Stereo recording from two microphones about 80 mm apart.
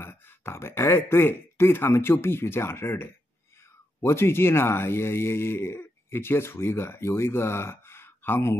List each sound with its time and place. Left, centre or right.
0.0 s speech: left